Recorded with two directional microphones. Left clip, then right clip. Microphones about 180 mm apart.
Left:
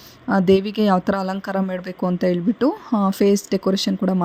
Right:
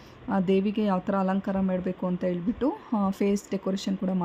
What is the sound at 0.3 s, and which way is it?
A woman's voice, 30° left (ahead or behind).